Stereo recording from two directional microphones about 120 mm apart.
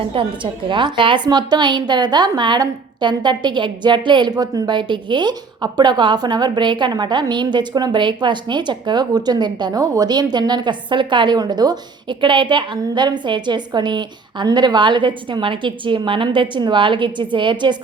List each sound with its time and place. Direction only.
0.0 s a woman's voice: 45° right (ahead or behind)